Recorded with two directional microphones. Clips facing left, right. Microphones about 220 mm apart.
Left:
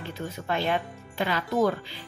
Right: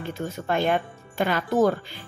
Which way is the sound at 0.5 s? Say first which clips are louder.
Right 4 dB; 50° right (ahead or behind).